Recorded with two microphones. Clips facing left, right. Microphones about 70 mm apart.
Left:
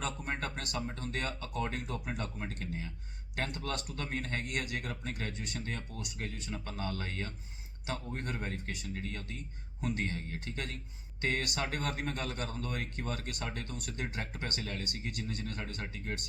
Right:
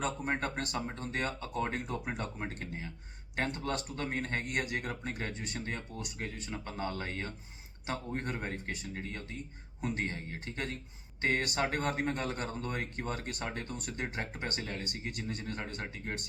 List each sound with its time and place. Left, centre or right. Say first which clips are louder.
0.3 s speech: right 4 dB; right